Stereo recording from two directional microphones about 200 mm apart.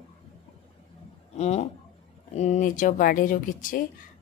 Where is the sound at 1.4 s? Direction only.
30° left (ahead or behind).